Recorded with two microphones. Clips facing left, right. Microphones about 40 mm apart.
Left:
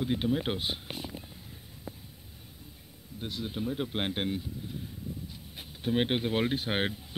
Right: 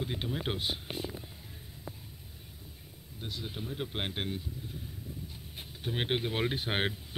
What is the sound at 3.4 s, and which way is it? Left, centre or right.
Speech, centre.